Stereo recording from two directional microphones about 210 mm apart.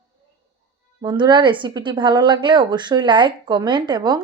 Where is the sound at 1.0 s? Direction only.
20° right (ahead or behind).